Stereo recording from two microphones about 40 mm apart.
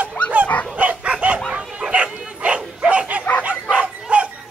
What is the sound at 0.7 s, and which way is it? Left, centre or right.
Dog, right.